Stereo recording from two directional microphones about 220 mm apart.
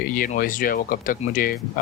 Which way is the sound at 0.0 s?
40° left (ahead or behind).